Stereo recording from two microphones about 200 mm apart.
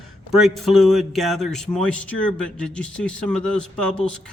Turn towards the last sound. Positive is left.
turn(degrees=5)  # may be behind; listen again after turning